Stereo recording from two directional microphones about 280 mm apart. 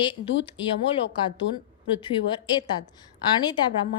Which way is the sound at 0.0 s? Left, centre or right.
Centre.